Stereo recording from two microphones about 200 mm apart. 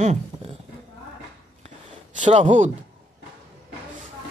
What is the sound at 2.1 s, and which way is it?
Speech, 40° right (ahead or behind).